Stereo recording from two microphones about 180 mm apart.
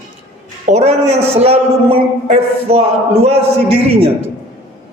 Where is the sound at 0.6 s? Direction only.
35° right (ahead or behind).